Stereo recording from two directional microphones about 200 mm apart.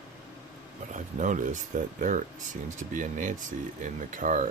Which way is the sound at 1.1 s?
40° right (ahead or behind).